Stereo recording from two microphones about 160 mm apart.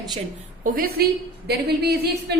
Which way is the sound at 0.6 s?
65° right (ahead or behind).